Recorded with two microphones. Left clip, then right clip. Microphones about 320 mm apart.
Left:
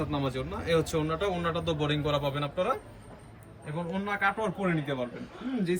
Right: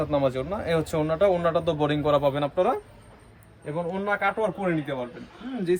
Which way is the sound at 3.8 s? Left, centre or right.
Right.